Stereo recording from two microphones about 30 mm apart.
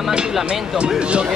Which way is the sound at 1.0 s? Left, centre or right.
Right.